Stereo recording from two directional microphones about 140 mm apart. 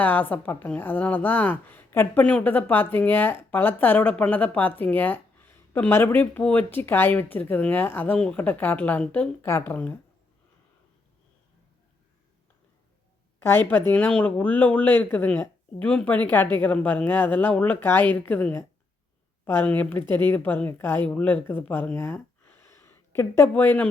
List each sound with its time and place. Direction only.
0.0 s a woman's voice: 15° left (ahead or behind)
13.4 s a woman's voice: 15° left (ahead or behind)